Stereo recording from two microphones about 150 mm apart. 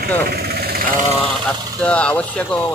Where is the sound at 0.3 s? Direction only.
90° right.